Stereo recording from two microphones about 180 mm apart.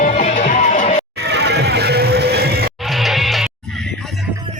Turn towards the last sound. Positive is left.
turn(degrees=0)  # may be behind; listen again after turning